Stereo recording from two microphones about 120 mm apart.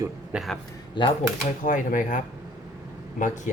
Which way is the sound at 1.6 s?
90° left.